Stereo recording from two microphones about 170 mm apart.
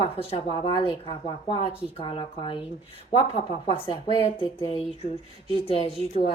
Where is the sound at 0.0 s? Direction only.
30° left (ahead or behind).